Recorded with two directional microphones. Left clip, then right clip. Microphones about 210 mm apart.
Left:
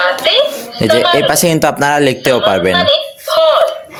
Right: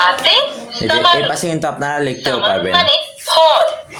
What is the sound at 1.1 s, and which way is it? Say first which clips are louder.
Speech: left 6 dB; 50° left (ahead or behind).